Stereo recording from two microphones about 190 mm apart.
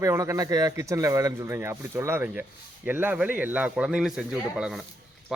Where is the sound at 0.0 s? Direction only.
15° right (ahead or behind).